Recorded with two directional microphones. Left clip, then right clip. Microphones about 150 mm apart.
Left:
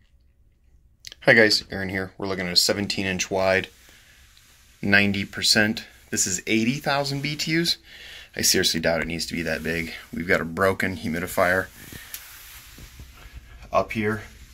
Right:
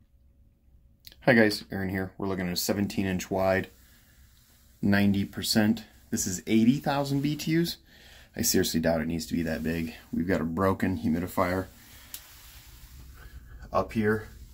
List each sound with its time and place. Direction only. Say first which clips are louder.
1.0 s speech: left 6 dB; 5° right (ahead or behind)
4.7 s speech: left 8 dB; 15° right (ahead or behind)
13.7 s speech: left 4 dB; 20° left (ahead or behind)